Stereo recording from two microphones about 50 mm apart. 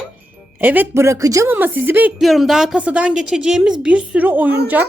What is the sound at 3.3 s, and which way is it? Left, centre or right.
Speech, centre.